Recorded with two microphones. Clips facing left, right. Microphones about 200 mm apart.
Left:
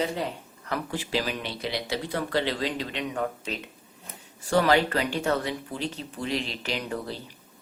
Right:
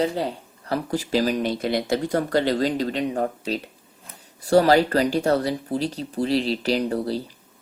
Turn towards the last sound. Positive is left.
turn(degrees=-35)  # may be behind; listen again after turning